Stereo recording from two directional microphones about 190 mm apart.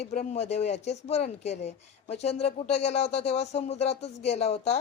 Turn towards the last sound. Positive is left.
turn(degrees=35)  # may be behind; listen again after turning